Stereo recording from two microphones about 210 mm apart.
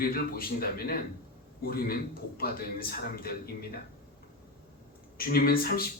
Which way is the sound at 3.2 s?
45° left (ahead or behind).